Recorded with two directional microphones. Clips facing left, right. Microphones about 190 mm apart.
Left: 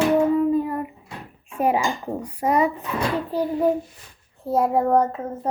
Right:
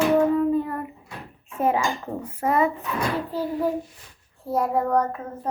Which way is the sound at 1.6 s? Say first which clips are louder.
Left 1 dB; 15° left (ahead or behind).